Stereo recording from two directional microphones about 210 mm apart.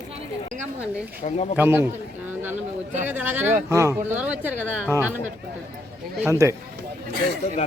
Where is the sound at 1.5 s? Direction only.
10° right (ahead or behind).